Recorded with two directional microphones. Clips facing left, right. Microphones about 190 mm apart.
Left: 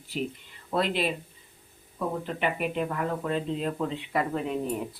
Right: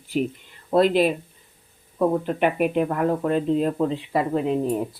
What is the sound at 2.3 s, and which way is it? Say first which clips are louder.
Speech: right 8 dB; 50° right (ahead or behind).